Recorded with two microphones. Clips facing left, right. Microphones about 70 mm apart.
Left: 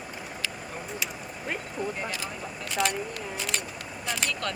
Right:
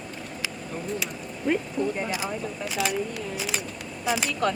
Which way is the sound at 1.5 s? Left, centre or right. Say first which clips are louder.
Right 9 dB; centre.